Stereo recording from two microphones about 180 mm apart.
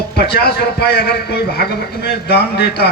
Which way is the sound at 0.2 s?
60° left (ahead or behind).